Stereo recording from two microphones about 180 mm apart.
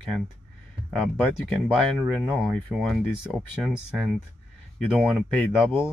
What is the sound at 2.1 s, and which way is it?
Speech, centre (ahead or behind).